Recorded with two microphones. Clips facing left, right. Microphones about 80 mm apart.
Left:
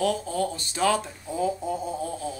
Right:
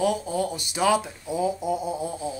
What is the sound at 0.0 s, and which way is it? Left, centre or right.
Speech, centre.